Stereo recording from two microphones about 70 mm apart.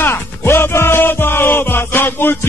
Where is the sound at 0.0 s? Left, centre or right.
Left.